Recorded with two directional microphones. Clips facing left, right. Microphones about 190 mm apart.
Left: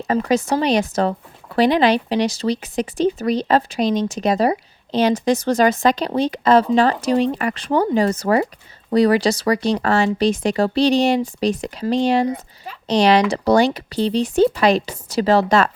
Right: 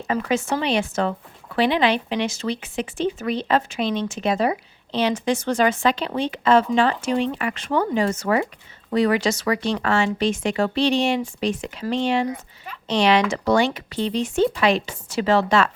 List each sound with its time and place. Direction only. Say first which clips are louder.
0.1 s speech: left 4 dB; 35° left (ahead or behind)